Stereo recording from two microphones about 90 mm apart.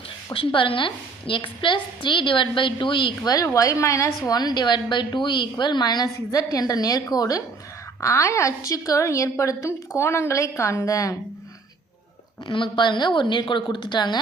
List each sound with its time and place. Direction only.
0.3 s a woman's voice: 75° left (ahead or behind)
3.3 s a woman's voice: 40° left (ahead or behind)
4.3 s a woman's voice: 50° left (ahead or behind)
8.0 s a woman's voice: 35° left (ahead or behind)
12.5 s a woman's voice: 65° left (ahead or behind)